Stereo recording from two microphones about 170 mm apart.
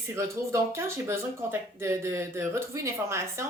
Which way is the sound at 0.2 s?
15° right (ahead or behind).